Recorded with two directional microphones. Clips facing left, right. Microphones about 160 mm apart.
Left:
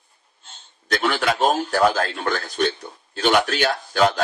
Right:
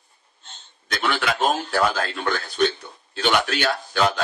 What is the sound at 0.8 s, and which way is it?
A man's voice, 40° left (ahead or behind).